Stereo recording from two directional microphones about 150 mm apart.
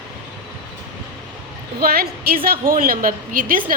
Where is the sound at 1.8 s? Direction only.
85° right.